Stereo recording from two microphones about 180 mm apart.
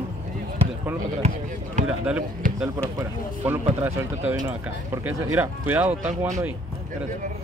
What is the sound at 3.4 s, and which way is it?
Speech, 10° right (ahead or behind).